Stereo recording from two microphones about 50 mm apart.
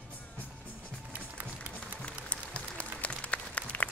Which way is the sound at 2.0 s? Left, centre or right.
Left.